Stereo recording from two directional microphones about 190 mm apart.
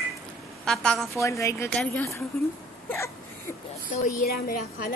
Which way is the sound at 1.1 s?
15° left (ahead or behind).